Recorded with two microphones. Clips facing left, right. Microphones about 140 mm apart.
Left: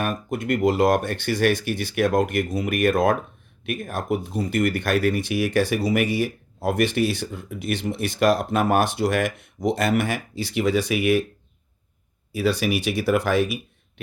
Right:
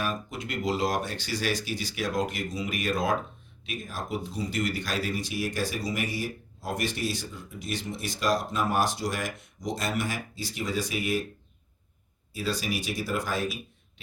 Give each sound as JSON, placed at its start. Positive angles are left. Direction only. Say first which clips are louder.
{"t": 0.0, "sound": "speech", "louder": "left 6 dB", "side_deg": 55}
{"t": 12.3, "sound": "speech", "louder": "left 9 dB", "side_deg": 65}